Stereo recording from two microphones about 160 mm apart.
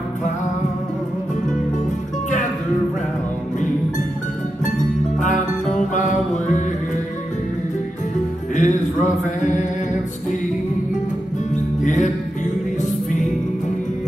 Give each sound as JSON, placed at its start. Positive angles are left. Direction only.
{"t": 4.6, "sound": "music", "side_deg": 50}
{"t": 5.9, "sound": "mantra", "side_deg": 50}
{"t": 8.5, "sound": "a sound", "side_deg": 50}
{"t": 11.5, "sound": "music", "side_deg": 50}